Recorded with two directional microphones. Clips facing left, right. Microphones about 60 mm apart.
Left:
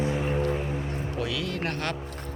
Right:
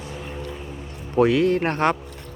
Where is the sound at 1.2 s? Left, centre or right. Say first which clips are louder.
Right 15 dB; right.